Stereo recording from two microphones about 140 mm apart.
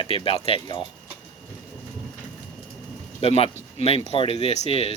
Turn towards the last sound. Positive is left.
turn(degrees=45)  # may be behind; listen again after turning